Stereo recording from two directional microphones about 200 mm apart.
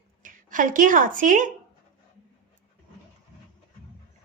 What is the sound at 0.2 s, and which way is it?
A woman's voice, 40° right (ahead or behind).